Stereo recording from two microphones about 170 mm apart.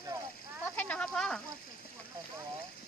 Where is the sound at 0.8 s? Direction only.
5° left (ahead or behind).